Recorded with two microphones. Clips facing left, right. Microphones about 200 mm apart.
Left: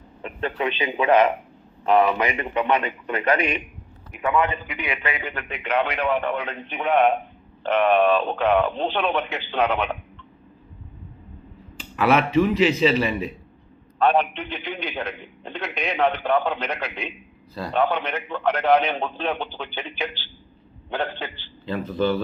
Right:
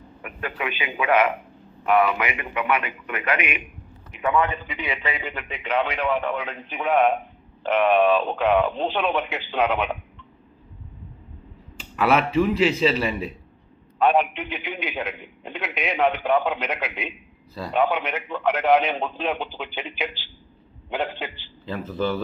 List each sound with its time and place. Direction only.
0.2 s telephone: 30° left (ahead or behind)
0.8 s a man's voice: 35° left (ahead or behind)
4.6 s a man's voice: centre (ahead or behind)
11.8 s a man's voice: centre (ahead or behind)